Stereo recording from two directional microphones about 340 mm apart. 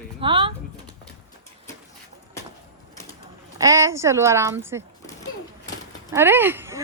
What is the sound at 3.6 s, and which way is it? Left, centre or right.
Speech, centre.